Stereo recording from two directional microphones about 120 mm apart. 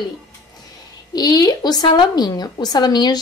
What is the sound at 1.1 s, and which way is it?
A woman's voice, 35° left (ahead or behind).